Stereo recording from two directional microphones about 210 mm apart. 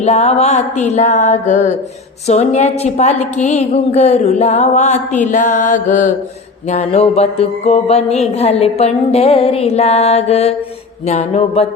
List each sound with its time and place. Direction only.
0.0 s a woman's voice: 30° left (ahead or behind)
6.7 s music: 30° left (ahead or behind)
11.0 s a woman's voice: 30° left (ahead or behind)